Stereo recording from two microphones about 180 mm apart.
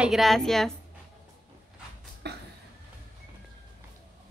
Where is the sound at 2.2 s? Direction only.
65° right (ahead or behind).